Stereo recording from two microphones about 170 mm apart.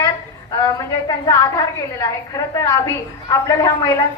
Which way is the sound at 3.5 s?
15° left (ahead or behind).